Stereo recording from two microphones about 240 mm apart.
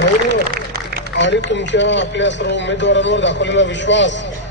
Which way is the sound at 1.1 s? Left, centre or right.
Left.